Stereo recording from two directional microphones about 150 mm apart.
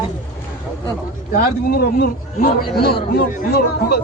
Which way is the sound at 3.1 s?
70° left (ahead or behind).